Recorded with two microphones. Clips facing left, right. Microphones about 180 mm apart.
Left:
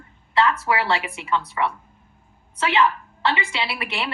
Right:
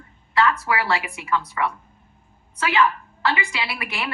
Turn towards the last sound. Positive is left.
turn(degrees=30)  # may be behind; listen again after turning